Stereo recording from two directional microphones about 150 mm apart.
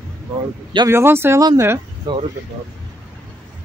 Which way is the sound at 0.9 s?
15° right (ahead or behind).